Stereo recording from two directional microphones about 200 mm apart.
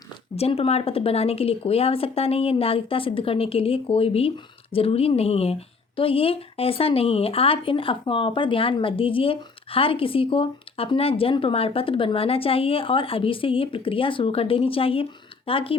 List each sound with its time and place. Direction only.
0.3 s speech: 30° left (ahead or behind)